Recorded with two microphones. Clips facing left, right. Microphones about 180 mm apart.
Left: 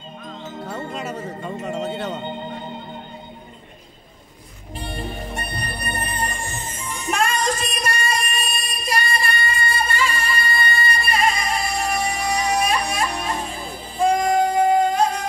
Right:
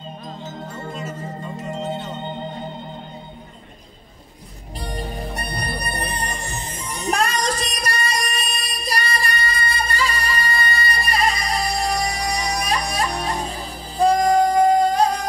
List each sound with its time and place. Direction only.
0.7 s music: 65° left (ahead or behind)
4.7 s music: 40° right (ahead or behind)